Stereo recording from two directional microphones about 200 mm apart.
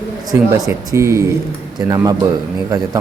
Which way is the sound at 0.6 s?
15° right (ahead or behind).